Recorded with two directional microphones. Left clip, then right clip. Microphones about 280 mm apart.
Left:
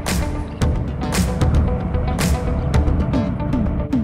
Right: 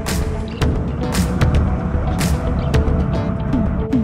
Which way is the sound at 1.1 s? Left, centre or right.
Centre.